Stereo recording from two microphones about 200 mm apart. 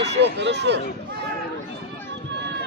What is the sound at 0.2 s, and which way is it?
Speech, 60° right (ahead or behind).